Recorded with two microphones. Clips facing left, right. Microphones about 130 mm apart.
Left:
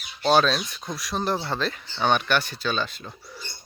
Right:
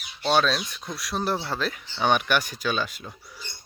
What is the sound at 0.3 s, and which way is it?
Speech, centre (ahead or behind).